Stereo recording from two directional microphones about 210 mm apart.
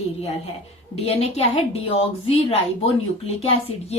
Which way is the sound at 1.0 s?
30° left (ahead or behind).